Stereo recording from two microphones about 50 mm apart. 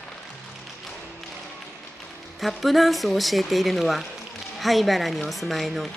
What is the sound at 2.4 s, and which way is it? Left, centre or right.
Speech, centre.